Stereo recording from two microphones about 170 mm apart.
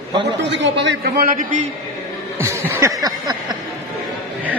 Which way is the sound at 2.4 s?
20° right (ahead or behind).